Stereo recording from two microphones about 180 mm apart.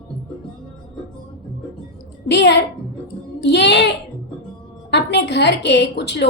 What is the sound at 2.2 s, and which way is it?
A woman's voice, 70° left (ahead or behind).